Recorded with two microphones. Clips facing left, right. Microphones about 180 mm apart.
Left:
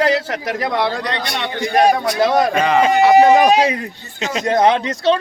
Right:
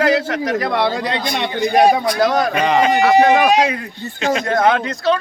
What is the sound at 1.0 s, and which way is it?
Speech, 10° right (ahead or behind).